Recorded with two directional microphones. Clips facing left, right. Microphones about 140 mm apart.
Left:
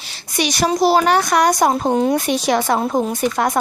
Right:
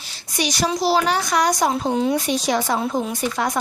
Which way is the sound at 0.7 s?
50° left (ahead or behind).